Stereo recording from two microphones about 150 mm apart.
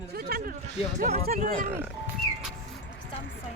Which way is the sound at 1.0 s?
45° right (ahead or behind).